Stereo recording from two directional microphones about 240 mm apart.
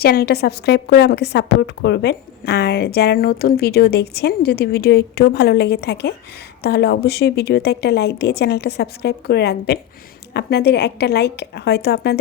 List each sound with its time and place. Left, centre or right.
0.0 s a woman's voice: left